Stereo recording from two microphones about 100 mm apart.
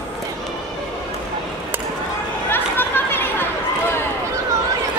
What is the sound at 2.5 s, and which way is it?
Chatter, 20° left (ahead or behind).